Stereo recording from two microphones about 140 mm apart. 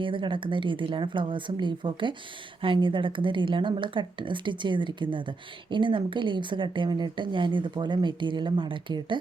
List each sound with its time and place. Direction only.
0.0 s a woman's voice: 35° right (ahead or behind)